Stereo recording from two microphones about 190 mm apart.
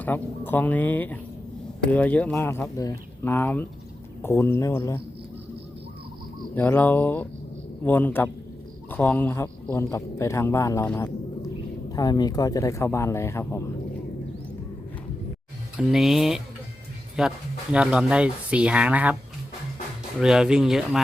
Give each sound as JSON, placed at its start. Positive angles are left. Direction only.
{"t": 0.0, "sound": "speech", "side_deg": 10}
{"t": 6.5, "sound": "speech", "side_deg": 10}
{"t": 15.8, "sound": "speech", "side_deg": 0}
{"t": 20.1, "sound": "speech", "side_deg": -5}